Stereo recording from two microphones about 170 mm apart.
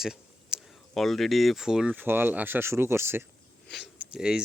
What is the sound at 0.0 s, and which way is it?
Speech, 5° right (ahead or behind).